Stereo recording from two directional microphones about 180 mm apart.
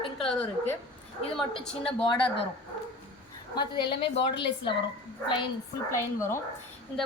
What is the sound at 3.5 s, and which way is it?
Speech, 25° left (ahead or behind).